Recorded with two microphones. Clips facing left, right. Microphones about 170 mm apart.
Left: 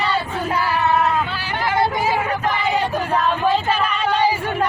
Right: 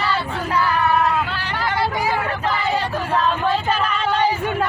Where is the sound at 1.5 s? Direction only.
25° left (ahead or behind).